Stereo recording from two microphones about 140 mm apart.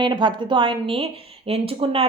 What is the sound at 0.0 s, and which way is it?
A woman's voice, 35° right (ahead or behind).